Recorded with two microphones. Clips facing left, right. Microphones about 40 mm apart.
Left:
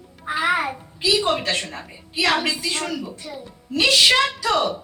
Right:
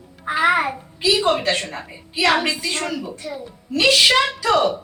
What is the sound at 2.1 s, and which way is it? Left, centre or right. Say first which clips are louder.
A woman's voice: right 2 dB; centre.